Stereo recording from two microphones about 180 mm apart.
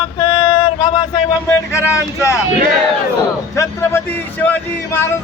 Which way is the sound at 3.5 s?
15° left (ahead or behind).